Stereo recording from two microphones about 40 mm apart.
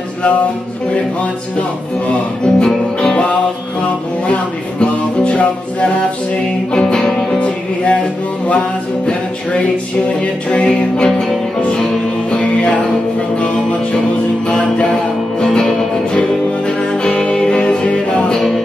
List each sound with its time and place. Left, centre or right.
2.4 s music: centre
5.3 s music: left
6.7 s music: left
7.3 s music: left
12.3 s music: left
14.5 s music: left
16.6 s music: left